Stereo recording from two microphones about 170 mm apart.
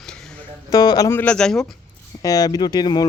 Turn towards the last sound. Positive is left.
turn(degrees=25)  # may be behind; listen again after turning